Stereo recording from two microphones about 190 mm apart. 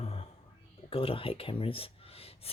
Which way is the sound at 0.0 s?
30° left (ahead or behind).